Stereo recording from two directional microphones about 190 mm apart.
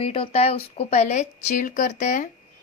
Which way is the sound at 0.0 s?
30° left (ahead or behind).